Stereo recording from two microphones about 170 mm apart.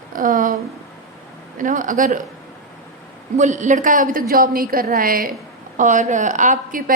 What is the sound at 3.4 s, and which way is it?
A woman's voice, 45° right (ahead or behind).